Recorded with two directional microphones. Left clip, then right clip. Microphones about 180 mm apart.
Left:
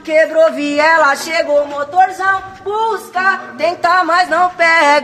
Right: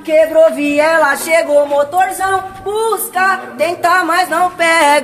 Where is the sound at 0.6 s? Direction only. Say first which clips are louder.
Even; 20° left (ahead or behind).